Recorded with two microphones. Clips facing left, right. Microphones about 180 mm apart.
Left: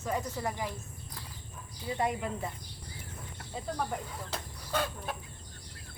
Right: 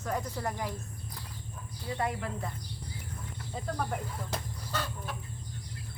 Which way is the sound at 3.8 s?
5° right (ahead or behind).